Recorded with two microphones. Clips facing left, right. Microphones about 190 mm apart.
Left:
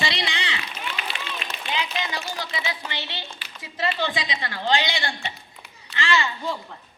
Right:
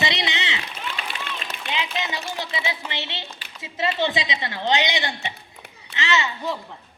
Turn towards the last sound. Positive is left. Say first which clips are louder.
# even
turn(degrees=-20)  # may be behind; listen again after turning